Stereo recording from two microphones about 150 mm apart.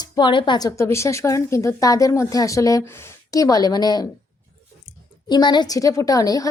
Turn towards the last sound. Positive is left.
turn(degrees=25)  # may be behind; listen again after turning